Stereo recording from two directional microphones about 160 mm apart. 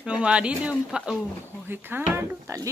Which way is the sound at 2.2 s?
20° right (ahead or behind).